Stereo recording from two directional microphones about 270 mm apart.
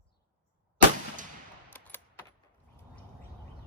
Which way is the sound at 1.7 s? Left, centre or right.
Centre.